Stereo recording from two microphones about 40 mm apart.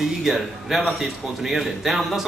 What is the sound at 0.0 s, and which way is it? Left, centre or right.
A man's voice, centre.